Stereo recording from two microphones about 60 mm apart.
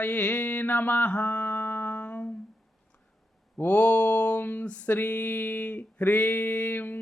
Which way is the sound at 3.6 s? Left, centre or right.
Left.